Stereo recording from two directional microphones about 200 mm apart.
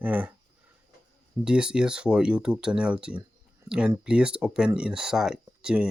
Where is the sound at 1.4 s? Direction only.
5° right (ahead or behind).